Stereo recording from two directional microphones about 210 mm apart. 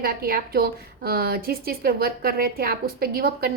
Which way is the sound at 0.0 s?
45° right (ahead or behind).